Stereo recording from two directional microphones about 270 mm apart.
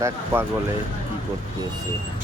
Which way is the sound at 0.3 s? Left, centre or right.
Centre.